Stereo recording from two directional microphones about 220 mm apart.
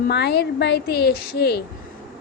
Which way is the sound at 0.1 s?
50° left (ahead or behind).